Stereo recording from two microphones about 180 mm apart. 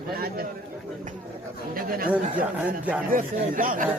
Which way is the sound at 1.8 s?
50° right (ahead or behind).